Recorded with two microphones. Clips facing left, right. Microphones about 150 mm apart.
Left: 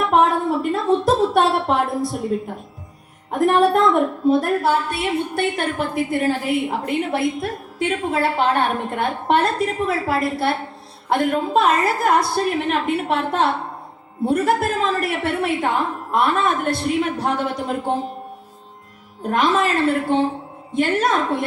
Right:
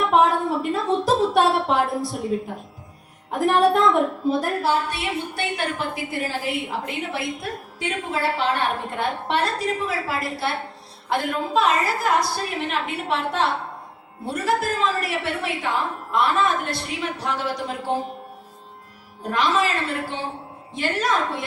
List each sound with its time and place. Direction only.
0.0 s a sound: centre (ahead or behind)
3.3 s a woman's voice: centre (ahead or behind)
4.6 s a woman's voice: 50° left (ahead or behind)
19.2 s a woman's voice: 50° left (ahead or behind)